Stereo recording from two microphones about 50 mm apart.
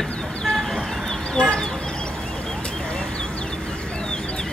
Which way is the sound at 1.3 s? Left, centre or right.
Centre.